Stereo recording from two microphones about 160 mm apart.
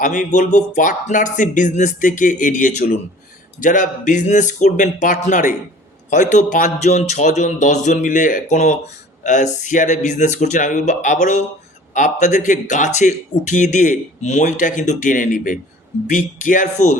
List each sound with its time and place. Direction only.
0.0 s speech: 50° left (ahead or behind)